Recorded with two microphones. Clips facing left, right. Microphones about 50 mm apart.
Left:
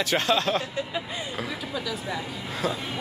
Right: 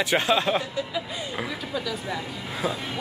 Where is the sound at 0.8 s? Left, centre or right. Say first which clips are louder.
Right 1 dB; left.